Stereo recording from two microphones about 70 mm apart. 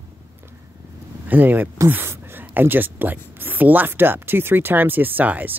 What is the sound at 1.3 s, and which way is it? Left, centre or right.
Speech, right.